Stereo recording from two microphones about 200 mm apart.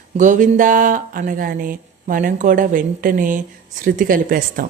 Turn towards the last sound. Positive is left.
turn(degrees=-45)  # may be behind; listen again after turning